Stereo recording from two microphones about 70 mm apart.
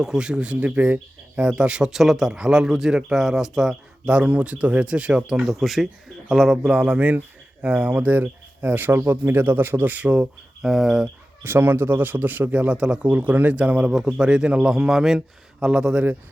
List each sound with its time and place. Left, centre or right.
0.0 s speech: centre
5.5 s speech: centre; by 10.1 s right
10.1 s speech: centre
11.4 s speech: right; by 16.0 s centre